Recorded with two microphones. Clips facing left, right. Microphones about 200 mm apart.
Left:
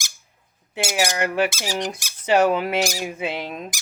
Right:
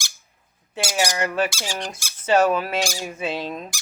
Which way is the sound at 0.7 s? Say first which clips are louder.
Left 1 dB; 25° left (ahead or behind).